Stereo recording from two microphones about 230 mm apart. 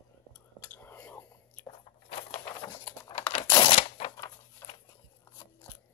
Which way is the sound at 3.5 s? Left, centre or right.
Left.